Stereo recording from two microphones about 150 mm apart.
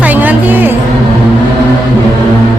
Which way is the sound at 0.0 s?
10° right (ahead or behind).